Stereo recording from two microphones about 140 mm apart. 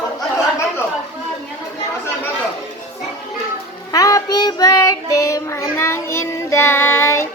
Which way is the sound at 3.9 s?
25° left (ahead or behind).